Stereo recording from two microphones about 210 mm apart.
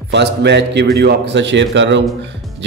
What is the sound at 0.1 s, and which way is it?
A man's voice, 55° right (ahead or behind).